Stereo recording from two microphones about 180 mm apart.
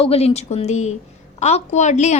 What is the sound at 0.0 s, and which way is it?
A woman's voice, 35° left (ahead or behind).